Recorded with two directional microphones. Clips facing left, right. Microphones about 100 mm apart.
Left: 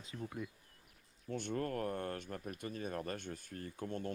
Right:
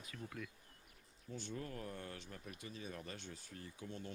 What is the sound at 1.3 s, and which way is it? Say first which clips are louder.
Speech: left 8 dB; 60° left (ahead or behind).